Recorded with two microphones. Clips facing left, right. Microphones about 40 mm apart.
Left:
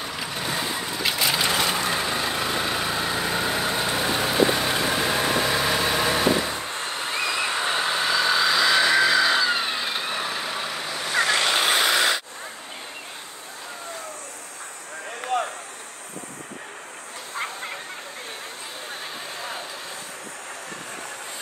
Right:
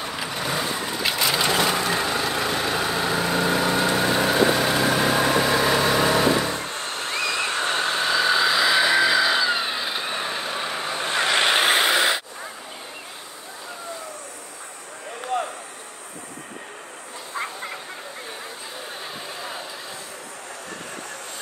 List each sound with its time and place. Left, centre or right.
0.0 s vehicle: centre
6.7 s music: centre
7.1 s vehicle: centre
10.7 s vehicle: right
15.3 s vehicle: left